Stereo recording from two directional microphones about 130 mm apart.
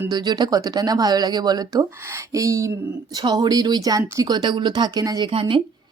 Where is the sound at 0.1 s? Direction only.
30° right (ahead or behind).